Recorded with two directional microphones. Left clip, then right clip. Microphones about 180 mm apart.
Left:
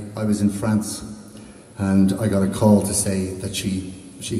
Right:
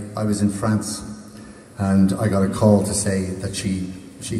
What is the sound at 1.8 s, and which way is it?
A man's voice, 25° left (ahead or behind).